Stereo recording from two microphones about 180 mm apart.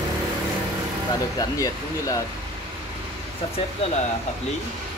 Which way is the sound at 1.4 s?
20° left (ahead or behind).